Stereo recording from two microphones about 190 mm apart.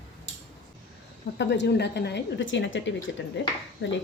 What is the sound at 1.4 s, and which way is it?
Speech, 65° left (ahead or behind).